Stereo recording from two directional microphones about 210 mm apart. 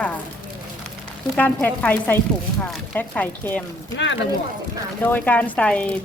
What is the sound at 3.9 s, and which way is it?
Speech, 60° left (ahead or behind).